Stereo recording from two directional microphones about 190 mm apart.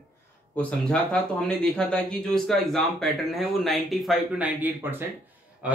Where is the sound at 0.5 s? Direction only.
5° left (ahead or behind).